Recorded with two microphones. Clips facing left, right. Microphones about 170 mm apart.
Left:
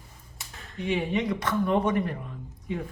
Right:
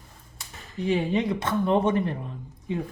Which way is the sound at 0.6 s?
Centre (ahead or behind).